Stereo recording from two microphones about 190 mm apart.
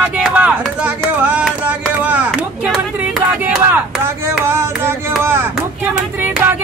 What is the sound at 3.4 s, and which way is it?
Speech, 5° right (ahead or behind).